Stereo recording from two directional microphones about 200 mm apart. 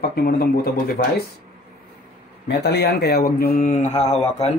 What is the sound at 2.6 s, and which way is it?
Speech, 60° left (ahead or behind).